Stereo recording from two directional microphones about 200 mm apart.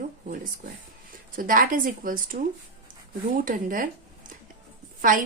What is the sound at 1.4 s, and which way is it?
A woman's voice, 45° right (ahead or behind).